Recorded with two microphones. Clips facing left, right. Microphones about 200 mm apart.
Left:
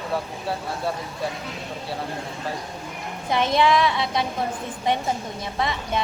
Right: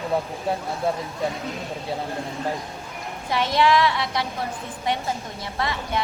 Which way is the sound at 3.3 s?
20° left (ahead or behind).